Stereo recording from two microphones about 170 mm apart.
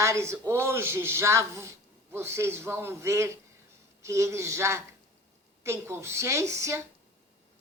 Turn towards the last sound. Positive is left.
turn(degrees=-15)  # may be behind; listen again after turning